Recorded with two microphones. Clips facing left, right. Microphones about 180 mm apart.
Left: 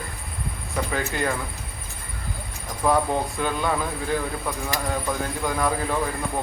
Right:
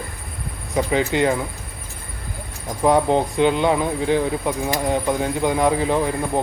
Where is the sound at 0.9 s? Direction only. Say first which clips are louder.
Right 8 dB; 20° right (ahead or behind).